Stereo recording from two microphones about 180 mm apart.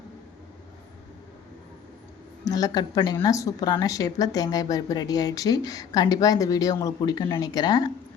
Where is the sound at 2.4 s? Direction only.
20° left (ahead or behind).